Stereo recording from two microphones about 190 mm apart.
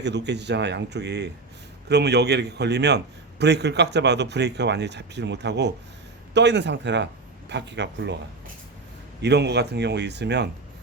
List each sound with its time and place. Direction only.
0.0 s a man's voice: 65° right (ahead or behind)
9.2 s a man's voice: 60° right (ahead or behind)